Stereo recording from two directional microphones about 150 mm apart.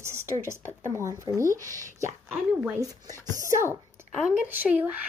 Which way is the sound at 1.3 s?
30° left (ahead or behind).